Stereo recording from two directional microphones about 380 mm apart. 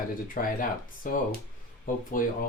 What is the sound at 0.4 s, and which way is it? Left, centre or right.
Speech, left.